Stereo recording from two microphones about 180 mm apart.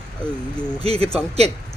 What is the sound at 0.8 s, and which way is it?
Speech, 35° right (ahead or behind).